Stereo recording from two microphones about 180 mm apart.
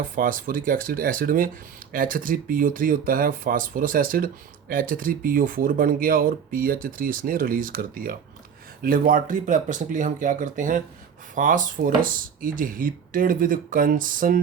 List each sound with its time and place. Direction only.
0.2 s speech: 50° right (ahead or behind)